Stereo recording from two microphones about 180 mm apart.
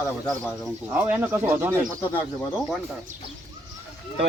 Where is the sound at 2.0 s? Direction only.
10° left (ahead or behind).